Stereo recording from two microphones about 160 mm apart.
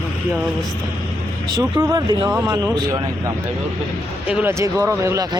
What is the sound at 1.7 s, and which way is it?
Speech, 25° right (ahead or behind).